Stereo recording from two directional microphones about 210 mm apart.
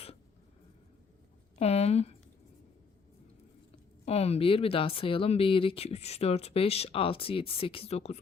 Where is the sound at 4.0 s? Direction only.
30° left (ahead or behind).